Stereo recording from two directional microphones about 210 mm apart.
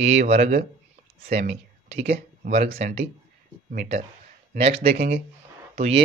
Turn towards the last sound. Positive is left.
turn(degrees=-30)  # may be behind; listen again after turning